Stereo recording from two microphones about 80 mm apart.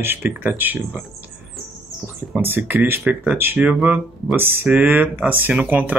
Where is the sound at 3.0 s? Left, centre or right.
Centre.